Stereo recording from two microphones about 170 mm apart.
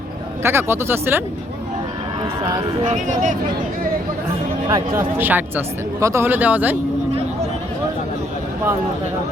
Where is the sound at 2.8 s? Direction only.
45° right (ahead or behind).